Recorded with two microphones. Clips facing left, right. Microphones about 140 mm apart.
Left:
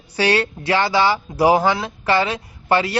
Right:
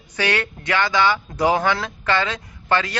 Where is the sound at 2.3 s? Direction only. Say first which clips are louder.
Left 3 dB; 15° left (ahead or behind).